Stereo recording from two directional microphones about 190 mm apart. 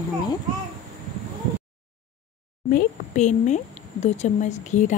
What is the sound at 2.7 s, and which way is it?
A woman's voice, 40° left (ahead or behind).